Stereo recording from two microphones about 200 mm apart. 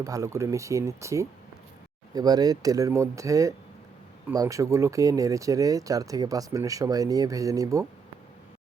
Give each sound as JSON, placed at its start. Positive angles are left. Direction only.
{"t": 0.0, "sound": "speech", "side_deg": -15}